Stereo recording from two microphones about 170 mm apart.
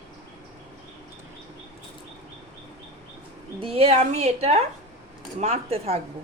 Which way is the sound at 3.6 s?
35° right (ahead or behind).